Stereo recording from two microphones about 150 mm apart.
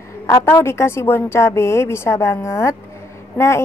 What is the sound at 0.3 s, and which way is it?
A woman's voice, 20° left (ahead or behind).